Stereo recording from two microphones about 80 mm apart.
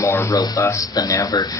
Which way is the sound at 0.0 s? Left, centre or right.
Left.